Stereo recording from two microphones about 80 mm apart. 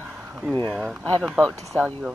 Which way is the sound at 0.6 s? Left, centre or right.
Centre.